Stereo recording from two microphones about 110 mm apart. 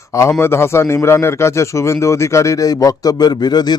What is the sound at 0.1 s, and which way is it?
A man's voice, 25° left (ahead or behind).